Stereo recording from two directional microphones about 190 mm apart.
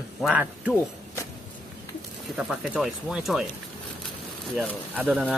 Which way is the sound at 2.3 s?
5° right (ahead or behind).